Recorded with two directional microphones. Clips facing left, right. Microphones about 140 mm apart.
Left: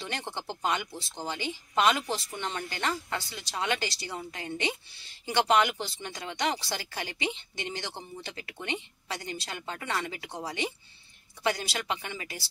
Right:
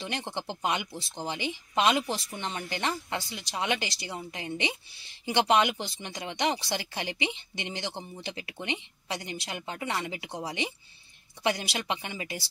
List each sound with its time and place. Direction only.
0.1 s speech: 15° right (ahead or behind)